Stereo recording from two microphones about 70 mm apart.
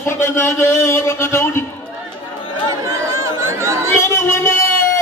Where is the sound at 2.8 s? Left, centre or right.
Right.